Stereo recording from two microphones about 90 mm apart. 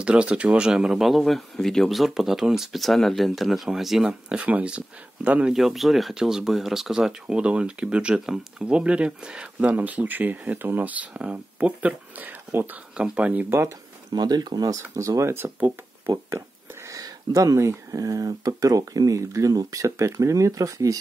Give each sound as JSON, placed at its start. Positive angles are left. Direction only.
{"t": 0.0, "sound": "speech", "side_deg": -10}
{"t": 5.5, "sound": "speech", "side_deg": -5}
{"t": 14.1, "sound": "speech", "side_deg": -50}
{"t": 16.1, "sound": "speech", "side_deg": -35}